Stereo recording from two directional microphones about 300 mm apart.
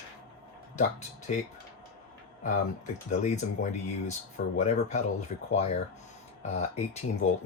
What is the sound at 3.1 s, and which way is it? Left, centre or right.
Speech, left.